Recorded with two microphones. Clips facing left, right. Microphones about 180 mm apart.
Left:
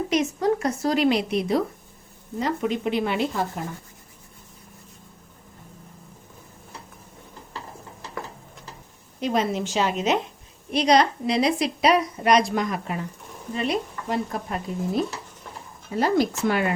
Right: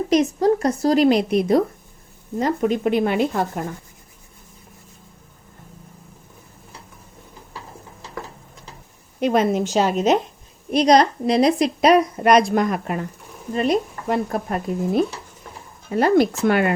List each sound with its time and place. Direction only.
0.1 s a woman's voice: 35° right (ahead or behind); by 3.6 s 50° right (ahead or behind)
9.2 s a woman's voice: 55° right (ahead or behind)
13.5 s a woman's voice: 45° right (ahead or behind)
15.9 s speech: 60° right (ahead or behind)